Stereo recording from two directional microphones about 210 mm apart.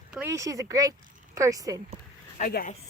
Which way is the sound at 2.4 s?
40° left (ahead or behind).